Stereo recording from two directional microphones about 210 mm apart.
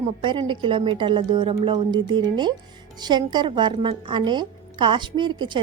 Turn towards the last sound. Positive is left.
turn(degrees=-20)  # may be behind; listen again after turning